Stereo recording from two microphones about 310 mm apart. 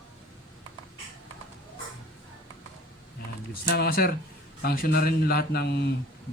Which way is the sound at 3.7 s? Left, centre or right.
Left.